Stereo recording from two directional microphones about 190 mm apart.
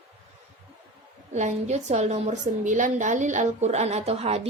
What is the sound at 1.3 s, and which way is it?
A woman's voice, 40° right (ahead or behind).